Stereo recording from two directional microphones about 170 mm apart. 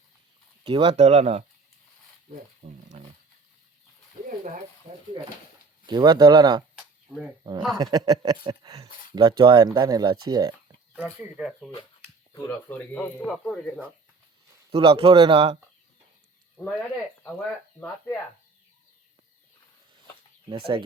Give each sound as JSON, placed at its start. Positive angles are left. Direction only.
{"t": 0.6, "sound": "speech", "side_deg": -35}
{"t": 2.9, "sound": "wild animals", "side_deg": -40}
{"t": 5.8, "sound": "speech", "side_deg": -25}
{"t": 6.7, "sound": "a sound", "side_deg": -10}
{"t": 7.7, "sound": "speech", "side_deg": -20}
{"t": 10.9, "sound": "speech", "side_deg": -10}
{"t": 12.3, "sound": "speech", "side_deg": 15}
{"t": 14.7, "sound": "speech", "side_deg": -30}
{"t": 20.5, "sound": "speech", "side_deg": -30}